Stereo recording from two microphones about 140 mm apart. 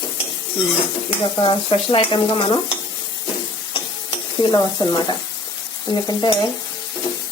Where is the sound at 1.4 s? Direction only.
40° left (ahead or behind).